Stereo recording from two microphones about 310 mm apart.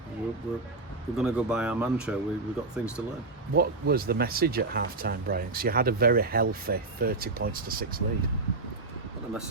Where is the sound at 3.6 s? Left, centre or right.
Right.